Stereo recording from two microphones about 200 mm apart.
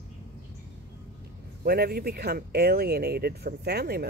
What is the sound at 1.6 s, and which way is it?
Speech, 50° right (ahead or behind).